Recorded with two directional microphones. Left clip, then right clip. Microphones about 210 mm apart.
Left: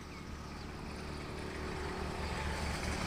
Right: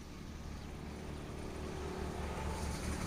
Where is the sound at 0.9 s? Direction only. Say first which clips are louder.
Left 3 dB; 15° left (ahead or behind).